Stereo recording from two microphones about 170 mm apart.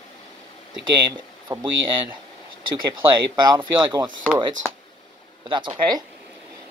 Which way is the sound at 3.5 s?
25° right (ahead or behind).